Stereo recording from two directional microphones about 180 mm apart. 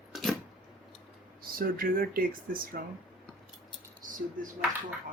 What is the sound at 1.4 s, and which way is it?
Speech, 55° right (ahead or behind).